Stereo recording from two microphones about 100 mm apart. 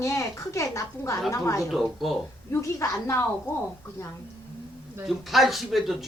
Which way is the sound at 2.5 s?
30° left (ahead or behind).